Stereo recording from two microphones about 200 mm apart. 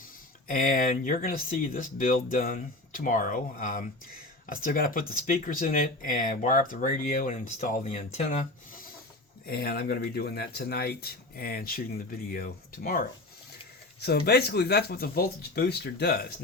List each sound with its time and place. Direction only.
0.0 s speech: 45° left (ahead or behind)
9.5 s speech: 50° left (ahead or behind)